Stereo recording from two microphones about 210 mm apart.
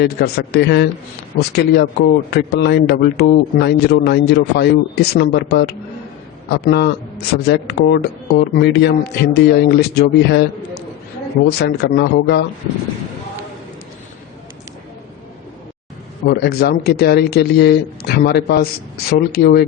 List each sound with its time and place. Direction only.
0.0 s a man's voice: 50° left (ahead or behind)
16.2 s a man's voice: 50° left (ahead or behind)